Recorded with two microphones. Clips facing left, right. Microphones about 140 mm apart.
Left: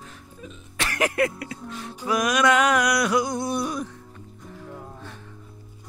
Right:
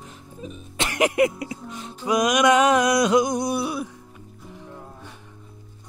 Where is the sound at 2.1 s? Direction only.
20° right (ahead or behind).